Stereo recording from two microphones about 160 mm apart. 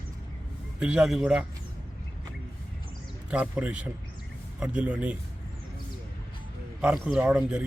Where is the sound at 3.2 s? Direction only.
10° right (ahead or behind).